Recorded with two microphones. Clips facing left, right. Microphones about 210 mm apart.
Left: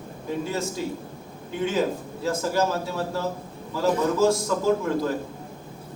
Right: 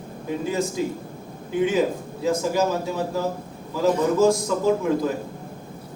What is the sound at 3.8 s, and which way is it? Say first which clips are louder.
Speech: right 3 dB; 15° right (ahead or behind).